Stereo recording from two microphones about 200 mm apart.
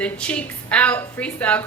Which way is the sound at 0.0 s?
5° left (ahead or behind).